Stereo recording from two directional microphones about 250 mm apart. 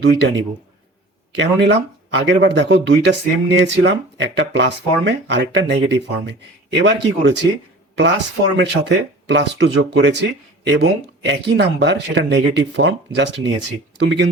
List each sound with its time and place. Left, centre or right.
0.0 s speech: right
8.5 s speech: right